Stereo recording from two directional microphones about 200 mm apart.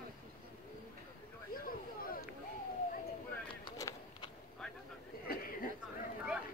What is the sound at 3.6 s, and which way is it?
Run, 20° left (ahead or behind).